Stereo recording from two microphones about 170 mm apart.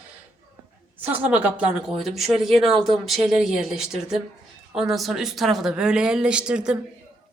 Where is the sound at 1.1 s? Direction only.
10° right (ahead or behind).